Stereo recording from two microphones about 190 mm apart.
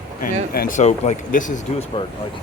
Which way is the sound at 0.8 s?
40° left (ahead or behind).